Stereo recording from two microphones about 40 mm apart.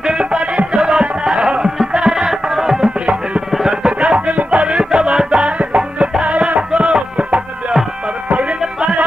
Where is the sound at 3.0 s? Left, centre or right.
Right.